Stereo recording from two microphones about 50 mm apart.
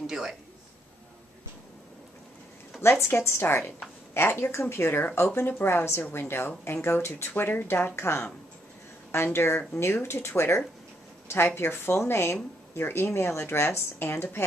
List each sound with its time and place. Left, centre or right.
0.0 s a man's voice: centre
2.8 s speech: left
7.2 s speech: left